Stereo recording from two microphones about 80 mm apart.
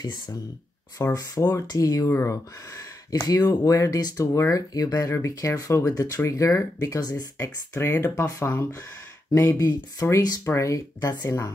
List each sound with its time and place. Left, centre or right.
1.0 s speech: left
1.7 s speech: left